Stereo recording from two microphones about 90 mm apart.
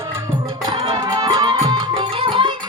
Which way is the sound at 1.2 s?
60° right (ahead or behind).